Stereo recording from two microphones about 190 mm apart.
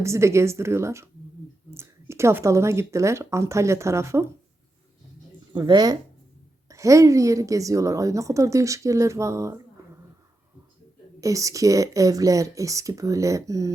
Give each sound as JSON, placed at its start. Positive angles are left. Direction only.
{"t": 0.0, "sound": "a woman's voice", "side_deg": -15}
{"t": 5.5, "sound": "a woman's voice", "side_deg": -20}
{"t": 11.2, "sound": "a woman's voice", "side_deg": -15}